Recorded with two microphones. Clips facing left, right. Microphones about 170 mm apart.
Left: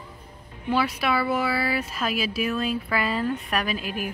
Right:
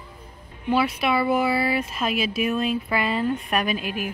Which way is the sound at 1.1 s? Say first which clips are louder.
Right 4 dB; 20° right (ahead or behind).